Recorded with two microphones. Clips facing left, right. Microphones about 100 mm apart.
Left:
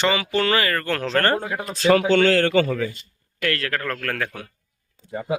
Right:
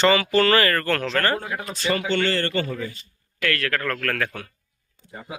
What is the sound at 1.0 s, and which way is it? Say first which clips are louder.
Speech: left 2 dB; 35° left (ahead or behind).